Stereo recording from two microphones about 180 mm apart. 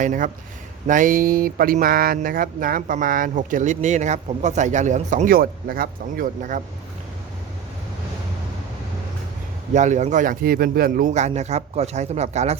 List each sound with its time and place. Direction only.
0.0 s speech: 45° right (ahead or behind)
9.7 s a man's voice: 40° right (ahead or behind)